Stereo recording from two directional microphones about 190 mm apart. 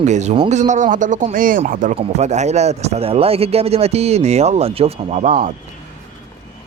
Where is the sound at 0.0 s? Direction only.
40° right (ahead or behind).